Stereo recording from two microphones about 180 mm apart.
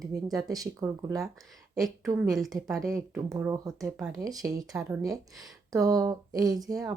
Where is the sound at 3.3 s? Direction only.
20° right (ahead or behind).